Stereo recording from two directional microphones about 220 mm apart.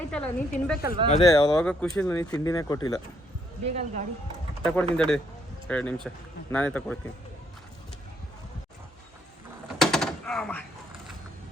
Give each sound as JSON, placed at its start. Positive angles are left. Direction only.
{"t": 0.1, "sound": "a woman's voice", "side_deg": 5}
{"t": 0.8, "sound": "speech", "side_deg": -15}
{"t": 1.2, "sound": "speech", "side_deg": 15}
{"t": 1.6, "sound": "speech", "side_deg": 5}
{"t": 3.6, "sound": "speech", "side_deg": -30}
{"t": 4.6, "sound": "speech", "side_deg": 5}
{"t": 9.8, "sound": "a sound", "side_deg": 0}